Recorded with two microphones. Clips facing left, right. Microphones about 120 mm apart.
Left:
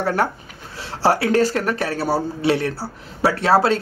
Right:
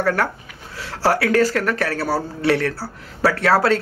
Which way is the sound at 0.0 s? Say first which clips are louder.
Even; 25° left (ahead or behind).